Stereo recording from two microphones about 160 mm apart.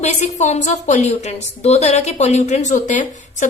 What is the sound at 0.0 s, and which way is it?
A woman's voice, 45° left (ahead or behind).